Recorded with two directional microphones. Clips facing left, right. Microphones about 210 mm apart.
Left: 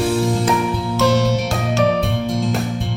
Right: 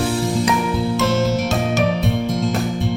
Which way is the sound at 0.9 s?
Centre (ahead or behind).